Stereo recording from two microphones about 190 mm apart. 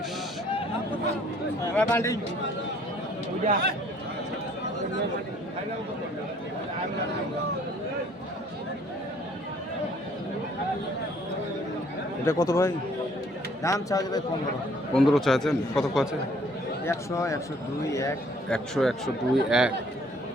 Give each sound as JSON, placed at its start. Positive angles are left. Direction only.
{"t": 1.7, "sound": "speech", "side_deg": 10}
{"t": 3.4, "sound": "speech", "side_deg": -50}
{"t": 12.2, "sound": "speech", "side_deg": 15}
{"t": 14.9, "sound": "a man's voice", "side_deg": 0}
{"t": 16.8, "sound": "speech", "side_deg": 15}
{"t": 18.5, "sound": "a man's voice", "side_deg": 0}